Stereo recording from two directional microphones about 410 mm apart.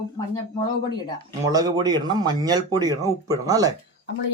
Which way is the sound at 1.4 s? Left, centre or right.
Centre.